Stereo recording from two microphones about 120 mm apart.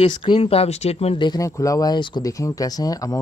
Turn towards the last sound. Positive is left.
turn(degrees=30)  # may be behind; listen again after turning